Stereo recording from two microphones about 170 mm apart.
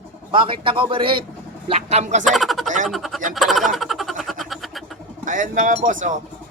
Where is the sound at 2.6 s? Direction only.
50° right (ahead or behind).